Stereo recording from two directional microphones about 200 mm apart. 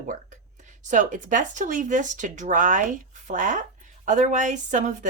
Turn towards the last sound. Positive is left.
turn(degrees=-40)  # may be behind; listen again after turning